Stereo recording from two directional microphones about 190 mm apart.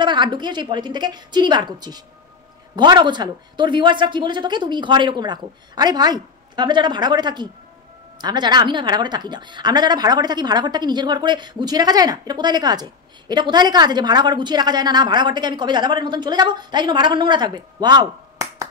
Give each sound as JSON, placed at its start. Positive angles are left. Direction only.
{"t": 0.0, "sound": "speech", "side_deg": -25}